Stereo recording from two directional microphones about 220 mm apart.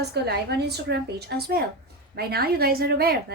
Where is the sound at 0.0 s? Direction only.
50° right (ahead or behind).